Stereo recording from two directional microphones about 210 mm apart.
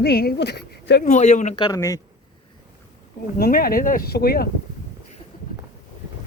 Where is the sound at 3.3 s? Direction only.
45° left (ahead or behind).